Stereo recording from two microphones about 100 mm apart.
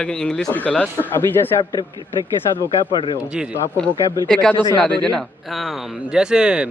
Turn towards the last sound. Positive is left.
turn(degrees=-10)  # may be behind; listen again after turning